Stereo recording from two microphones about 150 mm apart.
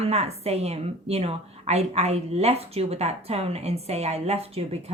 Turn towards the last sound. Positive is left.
turn(degrees=-45)  # may be behind; listen again after turning